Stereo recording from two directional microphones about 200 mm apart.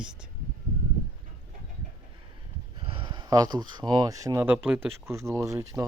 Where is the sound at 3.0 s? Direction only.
25° right (ahead or behind).